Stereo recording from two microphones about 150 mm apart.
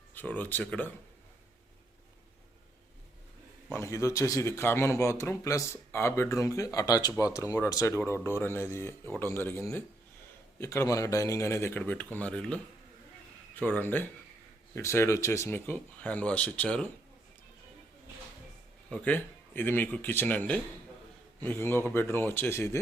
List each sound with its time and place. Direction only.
0.1 s speech: 10° left (ahead or behind)
3.7 s speech: 20° left (ahead or behind)
13.6 s speech: 10° left (ahead or behind)
18.9 s speech: 10° left (ahead or behind)